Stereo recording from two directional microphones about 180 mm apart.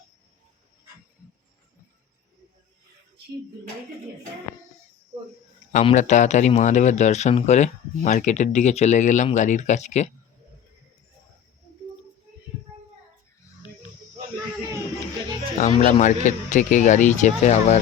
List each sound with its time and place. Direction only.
5.7 s a man's voice: 40° left (ahead or behind)
15.5 s speech: 45° left (ahead or behind)